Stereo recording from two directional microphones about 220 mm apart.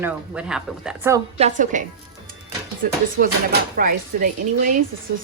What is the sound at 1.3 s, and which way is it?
Speech, 30° right (ahead or behind).